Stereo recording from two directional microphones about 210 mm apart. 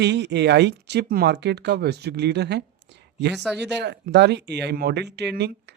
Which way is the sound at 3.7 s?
55° right (ahead or behind).